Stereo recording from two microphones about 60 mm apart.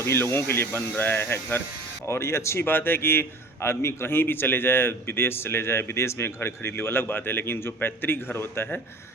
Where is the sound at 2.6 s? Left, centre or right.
Left.